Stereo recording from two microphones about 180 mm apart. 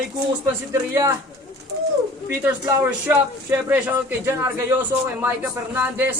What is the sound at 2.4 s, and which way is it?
Speech, 10° right (ahead or behind).